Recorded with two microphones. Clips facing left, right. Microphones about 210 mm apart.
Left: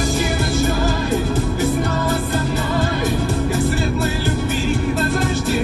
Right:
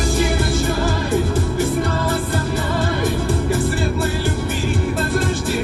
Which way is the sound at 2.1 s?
55° right (ahead or behind).